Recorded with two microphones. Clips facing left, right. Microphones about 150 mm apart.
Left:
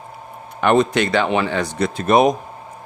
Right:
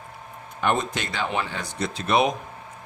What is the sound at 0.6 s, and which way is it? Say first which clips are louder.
Speech: left 9 dB; 75° left (ahead or behind).